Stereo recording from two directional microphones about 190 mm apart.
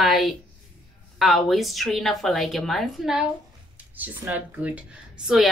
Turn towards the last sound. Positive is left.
turn(degrees=0)  # may be behind; listen again after turning